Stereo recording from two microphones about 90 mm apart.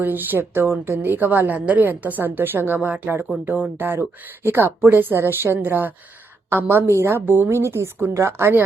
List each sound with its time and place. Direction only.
0.0 s a woman's voice: 20° right (ahead or behind)